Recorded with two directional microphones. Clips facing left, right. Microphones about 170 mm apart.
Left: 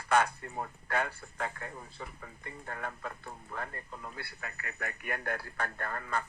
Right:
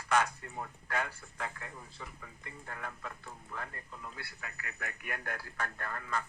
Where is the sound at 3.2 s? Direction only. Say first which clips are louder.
Left 3 dB; 55° left (ahead or behind).